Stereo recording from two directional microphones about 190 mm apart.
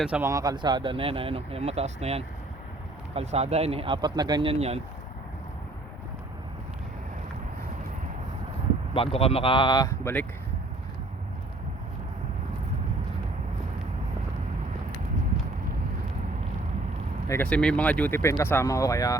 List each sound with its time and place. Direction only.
0.0 s speech: 10° right (ahead or behind); by 4.8 s 30° right (ahead or behind)
8.9 s speech: 30° left (ahead or behind); by 10.2 s 10° left (ahead or behind)
17.2 s speech: 10° left (ahead or behind)